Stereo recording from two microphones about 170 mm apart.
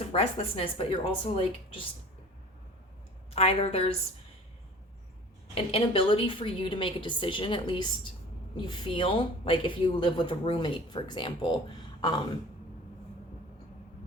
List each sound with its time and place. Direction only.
0.1 s a woman's voice: 35° left (ahead or behind)
3.3 s a woman's voice: 35° left (ahead or behind)
5.5 s a woman's voice: 35° left (ahead or behind)